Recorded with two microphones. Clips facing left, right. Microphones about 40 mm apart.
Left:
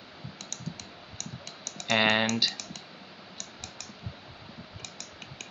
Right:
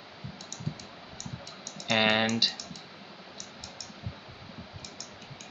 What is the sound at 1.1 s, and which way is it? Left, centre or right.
Music, left.